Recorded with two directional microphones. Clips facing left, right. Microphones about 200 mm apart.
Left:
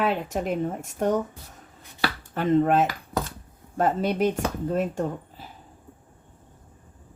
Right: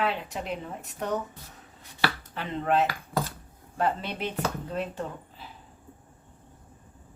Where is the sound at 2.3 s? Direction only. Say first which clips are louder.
Left 9 dB; 50° left (ahead or behind).